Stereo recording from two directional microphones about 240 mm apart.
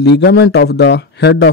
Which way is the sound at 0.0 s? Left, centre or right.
Left.